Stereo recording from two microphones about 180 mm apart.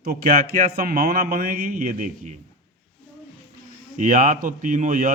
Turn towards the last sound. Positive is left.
turn(degrees=-45)  # may be behind; listen again after turning